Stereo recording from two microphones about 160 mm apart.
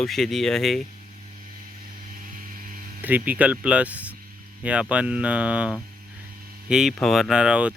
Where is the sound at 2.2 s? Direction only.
55° right (ahead or behind).